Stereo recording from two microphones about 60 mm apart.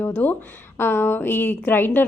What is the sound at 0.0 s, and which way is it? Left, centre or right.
A woman's voice, left.